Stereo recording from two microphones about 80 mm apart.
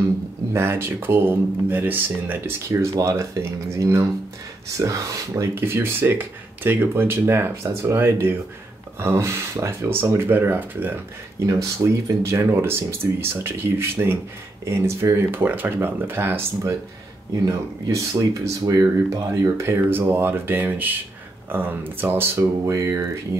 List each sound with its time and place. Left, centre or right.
0.5 s speech: right
5.5 s speech: right
12.1 s speech: right
17.5 s speech: right
22.7 s speech: right